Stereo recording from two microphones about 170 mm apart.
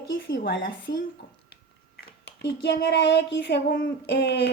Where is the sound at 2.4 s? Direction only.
85° left.